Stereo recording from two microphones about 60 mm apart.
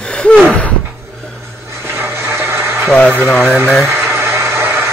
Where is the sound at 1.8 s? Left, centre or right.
Right.